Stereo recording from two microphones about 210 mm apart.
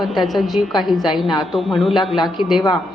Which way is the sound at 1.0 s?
20° left (ahead or behind).